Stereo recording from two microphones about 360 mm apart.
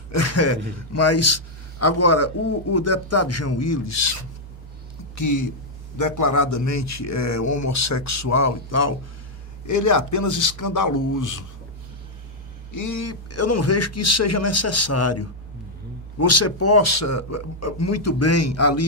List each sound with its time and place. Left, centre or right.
0.1 s speech: left
5.1 s a man's voice: left
12.7 s speech: left